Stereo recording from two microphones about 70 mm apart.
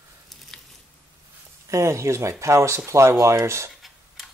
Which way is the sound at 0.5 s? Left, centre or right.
Centre.